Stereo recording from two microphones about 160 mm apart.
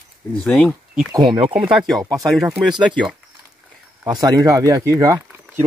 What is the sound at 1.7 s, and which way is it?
Speech, centre (ahead or behind).